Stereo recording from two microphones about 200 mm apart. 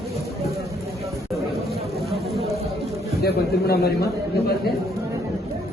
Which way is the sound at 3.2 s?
50° left (ahead or behind).